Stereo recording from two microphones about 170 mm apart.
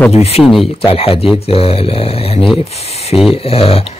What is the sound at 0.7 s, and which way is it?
Speech, 35° left (ahead or behind).